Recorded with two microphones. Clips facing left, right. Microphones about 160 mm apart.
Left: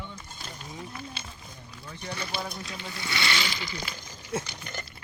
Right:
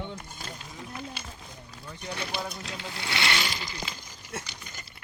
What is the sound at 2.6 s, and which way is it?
Speech, 80° right.